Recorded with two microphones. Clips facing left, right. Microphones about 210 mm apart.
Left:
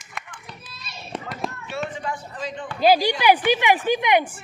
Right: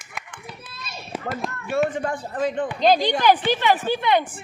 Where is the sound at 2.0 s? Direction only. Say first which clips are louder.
Right 6 dB; 50° right (ahead or behind).